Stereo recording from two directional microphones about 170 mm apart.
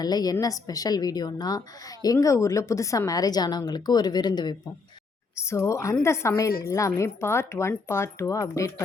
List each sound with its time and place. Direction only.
0.0 s a woman's voice: 20° left (ahead or behind)